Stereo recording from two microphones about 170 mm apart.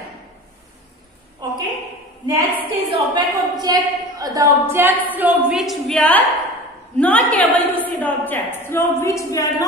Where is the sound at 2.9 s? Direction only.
25° right (ahead or behind).